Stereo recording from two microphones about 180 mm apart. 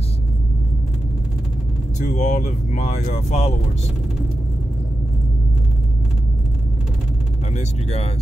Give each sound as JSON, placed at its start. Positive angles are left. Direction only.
{"t": 2.0, "sound": "speech", "side_deg": 40}
{"t": 7.5, "sound": "speech", "side_deg": 35}